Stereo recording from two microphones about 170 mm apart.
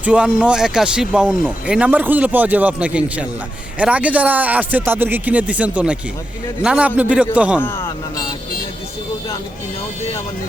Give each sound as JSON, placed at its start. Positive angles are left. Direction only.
{"t": 0.0, "sound": "speech", "side_deg": -5}